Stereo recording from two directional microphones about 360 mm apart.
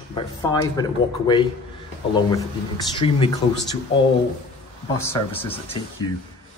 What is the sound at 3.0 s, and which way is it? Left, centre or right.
Speech, centre.